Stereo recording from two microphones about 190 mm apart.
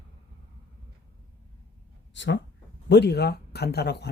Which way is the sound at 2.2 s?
70° left (ahead or behind).